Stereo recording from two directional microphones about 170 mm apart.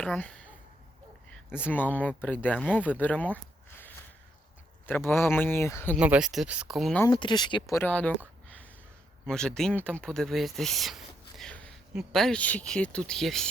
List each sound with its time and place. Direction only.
0.0 s a sound: 5° left (ahead or behind)
1.3 s speech: 10° left (ahead or behind)
6.0 s speech: 5° right (ahead or behind)
7.1 s speech: 25° left (ahead or behind)
7.8 s speech: 10° left (ahead or behind)
9.2 s speech: 5° left (ahead or behind)